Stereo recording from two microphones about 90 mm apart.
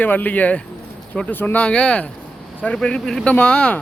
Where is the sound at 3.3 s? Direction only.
15° left (ahead or behind).